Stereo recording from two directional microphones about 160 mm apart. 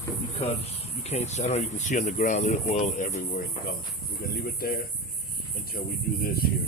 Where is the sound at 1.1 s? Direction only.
45° left (ahead or behind).